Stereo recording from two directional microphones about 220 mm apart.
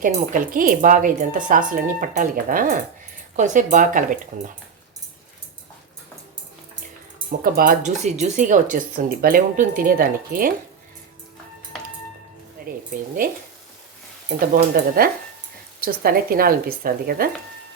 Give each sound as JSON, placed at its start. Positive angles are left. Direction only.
{"t": 0.0, "sound": "speech", "side_deg": -40}
{"t": 7.3, "sound": "speech", "side_deg": -40}
{"t": 12.6, "sound": "a sound", "side_deg": -40}
{"t": 14.8, "sound": "speech", "side_deg": -45}